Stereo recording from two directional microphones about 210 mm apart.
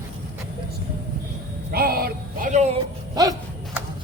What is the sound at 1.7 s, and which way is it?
Music, 45° right (ahead or behind).